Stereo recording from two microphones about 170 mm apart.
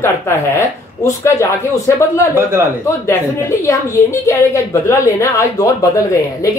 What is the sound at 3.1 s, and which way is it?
Speech, 15° left (ahead or behind).